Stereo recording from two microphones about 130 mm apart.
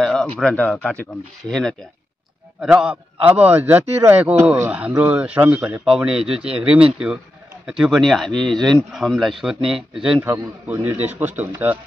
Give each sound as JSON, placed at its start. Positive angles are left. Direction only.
{"t": 0.0, "sound": "a man's voice", "side_deg": 5}
{"t": 10.2, "sound": "a man's voice", "side_deg": -20}